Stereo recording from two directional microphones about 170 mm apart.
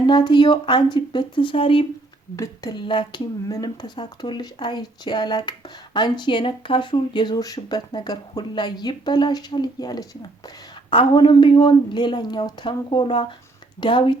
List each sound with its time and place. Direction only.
0.0 s speech: 25° left (ahead or behind)
2.3 s speech: 20° left (ahead or behind)